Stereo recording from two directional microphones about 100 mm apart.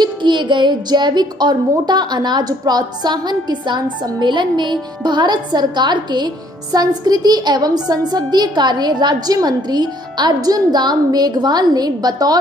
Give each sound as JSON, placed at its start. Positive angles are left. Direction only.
{"t": 0.0, "sound": "speech", "side_deg": -50}